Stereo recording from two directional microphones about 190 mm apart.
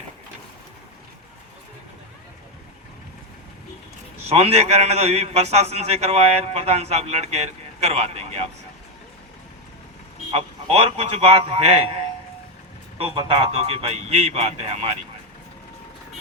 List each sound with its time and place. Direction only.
4.3 s a man's voice: 35° right (ahead or behind)
10.3 s a man's voice: 35° right (ahead or behind)
13.1 s a man's voice: 30° right (ahead or behind)